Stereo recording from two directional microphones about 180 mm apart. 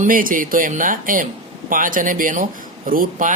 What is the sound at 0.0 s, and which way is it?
Speech, 50° right (ahead or behind).